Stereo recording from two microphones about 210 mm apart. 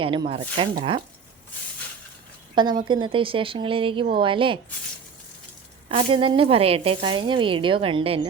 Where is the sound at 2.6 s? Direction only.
20° right (ahead or behind).